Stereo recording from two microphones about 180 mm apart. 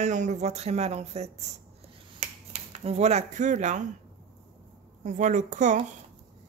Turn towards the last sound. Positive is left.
turn(degrees=-45)  # may be behind; listen again after turning